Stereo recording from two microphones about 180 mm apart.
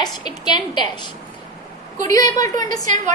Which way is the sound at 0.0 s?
25° left (ahead or behind).